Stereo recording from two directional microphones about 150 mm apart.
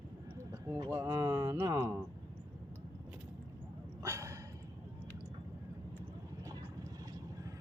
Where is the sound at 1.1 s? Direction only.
20° right (ahead or behind).